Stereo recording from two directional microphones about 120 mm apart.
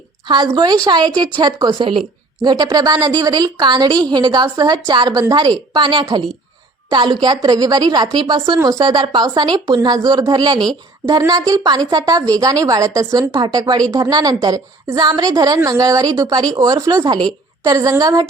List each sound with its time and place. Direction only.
0.3 s a woman's voice: 40° right (ahead or behind)